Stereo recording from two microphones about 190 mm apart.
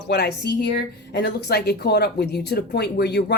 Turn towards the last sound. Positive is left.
turn(degrees=60)  # may be behind; listen again after turning